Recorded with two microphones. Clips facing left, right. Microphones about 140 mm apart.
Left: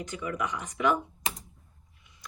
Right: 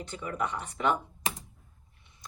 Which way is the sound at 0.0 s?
30° right (ahead or behind).